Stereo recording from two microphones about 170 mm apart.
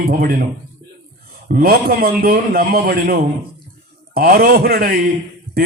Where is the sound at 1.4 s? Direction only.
60° right (ahead or behind).